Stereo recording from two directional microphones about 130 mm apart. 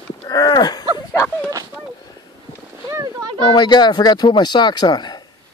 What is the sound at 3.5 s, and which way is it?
Speech, 35° left (ahead or behind).